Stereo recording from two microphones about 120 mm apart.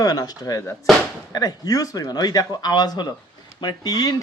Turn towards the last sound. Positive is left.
turn(degrees=30)  # may be behind; listen again after turning